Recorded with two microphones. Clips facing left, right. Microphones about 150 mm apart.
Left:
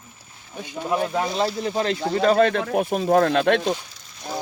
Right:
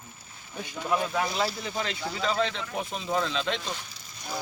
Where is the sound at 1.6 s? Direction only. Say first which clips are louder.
Left 9 dB; 35° left (ahead or behind); by 3.7 s 65° left (ahead or behind).